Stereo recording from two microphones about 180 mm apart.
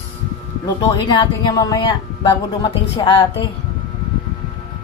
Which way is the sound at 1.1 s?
20° left (ahead or behind).